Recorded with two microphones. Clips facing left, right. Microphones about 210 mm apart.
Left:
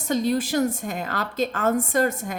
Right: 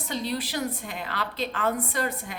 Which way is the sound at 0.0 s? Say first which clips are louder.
Left 8 dB; 45° left (ahead or behind).